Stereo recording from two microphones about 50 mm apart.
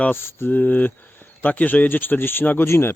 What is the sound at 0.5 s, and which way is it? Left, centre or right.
Speech, left.